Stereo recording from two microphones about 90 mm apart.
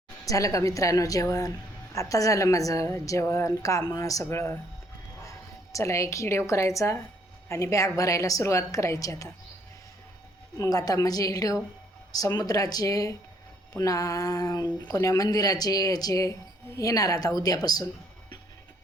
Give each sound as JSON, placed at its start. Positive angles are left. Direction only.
{"t": 0.3, "sound": "a woman's voice", "side_deg": 35}
{"t": 5.7, "sound": "a woman's voice", "side_deg": 35}
{"t": 10.6, "sound": "a woman's voice", "side_deg": 45}